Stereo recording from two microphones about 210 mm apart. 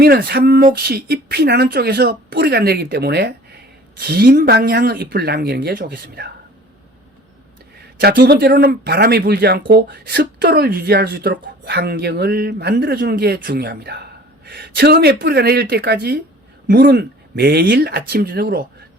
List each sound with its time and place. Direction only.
0.0 s speech: 45° right (ahead or behind)
7.9 s speech: 45° right (ahead or behind)